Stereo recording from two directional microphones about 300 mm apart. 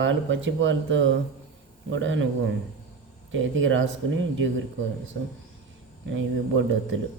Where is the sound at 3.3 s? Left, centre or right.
Right.